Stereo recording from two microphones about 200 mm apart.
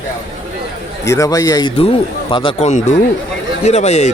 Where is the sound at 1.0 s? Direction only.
15° left (ahead or behind); by 4.1 s 35° left (ahead or behind).